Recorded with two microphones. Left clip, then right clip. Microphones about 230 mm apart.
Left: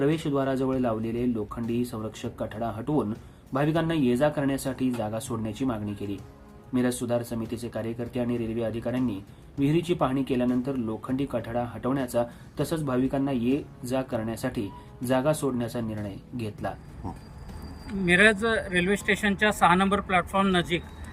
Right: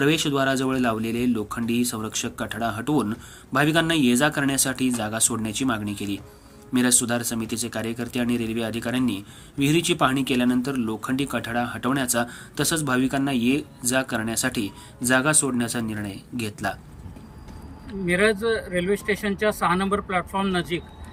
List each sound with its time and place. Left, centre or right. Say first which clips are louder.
0.0 s speech: right 5 dB; centre
18.0 s speech: left 1 dB; centre